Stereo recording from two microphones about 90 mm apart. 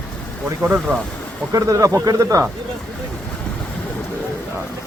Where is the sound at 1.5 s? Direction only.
40° right (ahead or behind).